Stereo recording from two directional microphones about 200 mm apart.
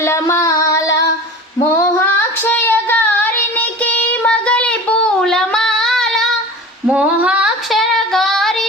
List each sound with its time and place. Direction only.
0.0 s singing: 15° left (ahead or behind)
1.7 s child singing: 15° left (ahead or behind)
6.9 s female singing: 5° right (ahead or behind)